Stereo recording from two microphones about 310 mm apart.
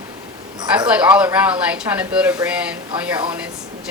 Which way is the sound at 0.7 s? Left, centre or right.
Centre.